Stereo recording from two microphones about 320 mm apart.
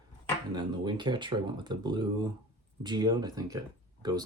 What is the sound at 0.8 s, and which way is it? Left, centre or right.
Speech, centre.